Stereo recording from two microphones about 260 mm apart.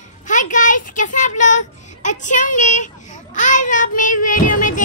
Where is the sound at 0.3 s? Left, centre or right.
Left.